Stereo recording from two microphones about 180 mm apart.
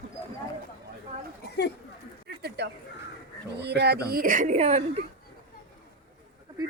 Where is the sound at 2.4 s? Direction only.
65° right (ahead or behind).